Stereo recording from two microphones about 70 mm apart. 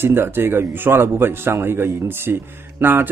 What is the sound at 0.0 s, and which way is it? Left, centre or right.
Speech, right.